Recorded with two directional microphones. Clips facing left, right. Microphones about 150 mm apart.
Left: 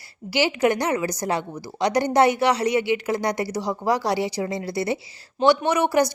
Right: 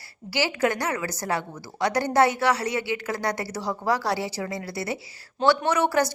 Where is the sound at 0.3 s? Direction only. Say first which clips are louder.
Left 4 dB; 20° left (ahead or behind).